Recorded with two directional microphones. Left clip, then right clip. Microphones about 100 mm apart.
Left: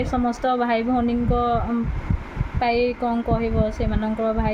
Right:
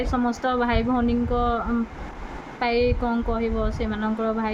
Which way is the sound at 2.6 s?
35° left (ahead or behind).